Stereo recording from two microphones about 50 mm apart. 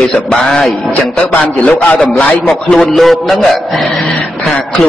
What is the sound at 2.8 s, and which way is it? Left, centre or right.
A man's voice, centre.